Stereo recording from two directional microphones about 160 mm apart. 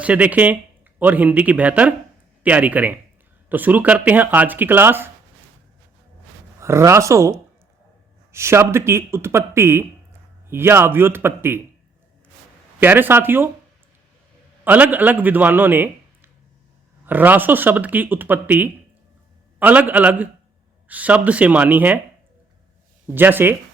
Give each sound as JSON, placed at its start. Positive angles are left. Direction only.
{"t": 0.0, "sound": "speech", "side_deg": -10}
{"t": 6.6, "sound": "speech", "side_deg": -15}
{"t": 12.8, "sound": "speech", "side_deg": -10}
{"t": 14.6, "sound": "a man's voice", "side_deg": -10}
{"t": 23.0, "sound": "speech", "side_deg": -10}